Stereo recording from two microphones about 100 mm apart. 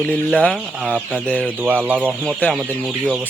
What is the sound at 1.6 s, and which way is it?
Speech, 15° right (ahead or behind).